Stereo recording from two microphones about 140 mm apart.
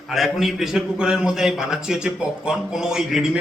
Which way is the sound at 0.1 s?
Centre (ahead or behind).